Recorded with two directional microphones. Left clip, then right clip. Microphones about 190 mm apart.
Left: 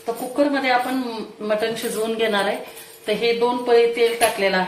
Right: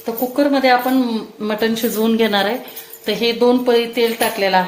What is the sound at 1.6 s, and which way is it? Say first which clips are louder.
Speech: right 5 dB; 60° right (ahead or behind).